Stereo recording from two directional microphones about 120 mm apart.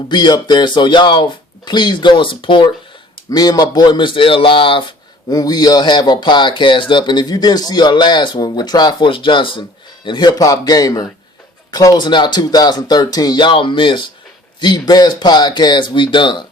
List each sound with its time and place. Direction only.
0.1 s speech: 40° left (ahead or behind)
3.2 s speech: 30° left (ahead or behind)
5.3 s speech: 35° left (ahead or behind)